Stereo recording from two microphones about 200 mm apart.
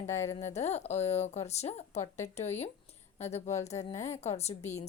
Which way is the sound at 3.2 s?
35° left (ahead or behind).